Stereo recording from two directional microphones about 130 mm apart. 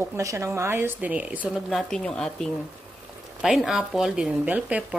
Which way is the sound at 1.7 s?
Centre (ahead or behind).